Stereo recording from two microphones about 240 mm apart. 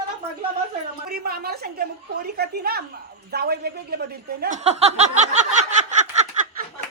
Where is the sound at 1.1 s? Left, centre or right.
Right.